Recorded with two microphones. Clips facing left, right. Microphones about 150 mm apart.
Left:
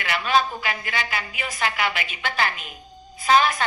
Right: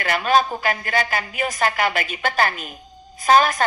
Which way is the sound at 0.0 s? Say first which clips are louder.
Right 3 dB; 45° right (ahead or behind).